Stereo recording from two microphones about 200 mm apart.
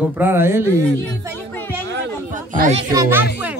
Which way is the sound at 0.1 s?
10° right (ahead or behind).